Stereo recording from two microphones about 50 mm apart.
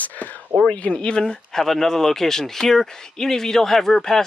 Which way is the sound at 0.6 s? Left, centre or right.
Left.